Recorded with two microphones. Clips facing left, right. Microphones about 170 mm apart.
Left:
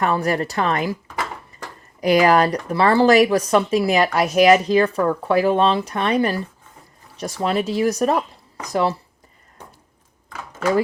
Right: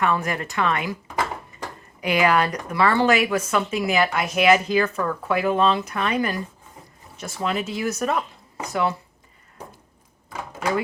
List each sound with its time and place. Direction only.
0.0 s speech: 35° left (ahead or behind)
2.0 s speech: 35° left (ahead or behind)